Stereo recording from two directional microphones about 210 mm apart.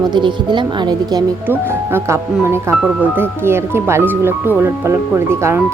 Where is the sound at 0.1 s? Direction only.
20° right (ahead or behind).